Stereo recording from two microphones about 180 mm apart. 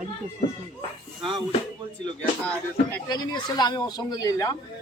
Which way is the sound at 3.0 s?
20° left (ahead or behind).